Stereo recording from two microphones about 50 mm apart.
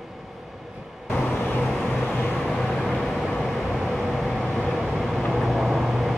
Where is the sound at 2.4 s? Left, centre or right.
Centre.